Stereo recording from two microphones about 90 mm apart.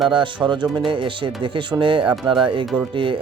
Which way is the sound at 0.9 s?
70° right (ahead or behind).